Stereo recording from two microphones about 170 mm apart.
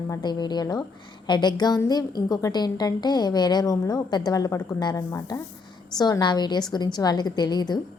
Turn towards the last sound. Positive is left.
turn(degrees=25)  # may be behind; listen again after turning